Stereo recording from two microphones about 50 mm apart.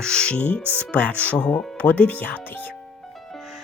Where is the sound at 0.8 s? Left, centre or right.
Left.